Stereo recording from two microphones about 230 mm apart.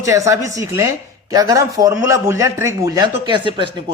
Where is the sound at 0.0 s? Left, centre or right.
Centre.